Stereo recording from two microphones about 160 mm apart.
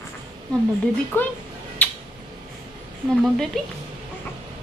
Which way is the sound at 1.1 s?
10° left (ahead or behind).